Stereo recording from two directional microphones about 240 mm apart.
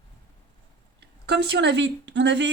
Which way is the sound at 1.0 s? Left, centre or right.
Right.